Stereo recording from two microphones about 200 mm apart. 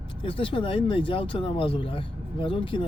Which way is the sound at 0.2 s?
25° left (ahead or behind).